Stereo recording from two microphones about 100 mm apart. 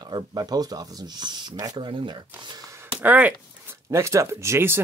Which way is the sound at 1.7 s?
55° right (ahead or behind).